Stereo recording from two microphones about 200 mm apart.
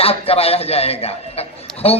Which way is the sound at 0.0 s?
30° left (ahead or behind).